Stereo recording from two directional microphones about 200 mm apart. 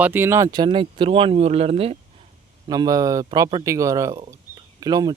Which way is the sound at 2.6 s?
20° right (ahead or behind).